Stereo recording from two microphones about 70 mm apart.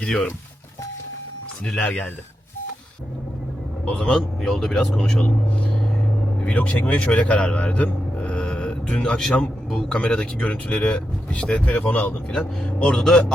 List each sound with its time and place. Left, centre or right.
0.0 s speech: centre
1.6 s speech: centre
3.8 s speech: centre
6.4 s a man's voice: left; by 10.0 s centre
10.0 s speech: centre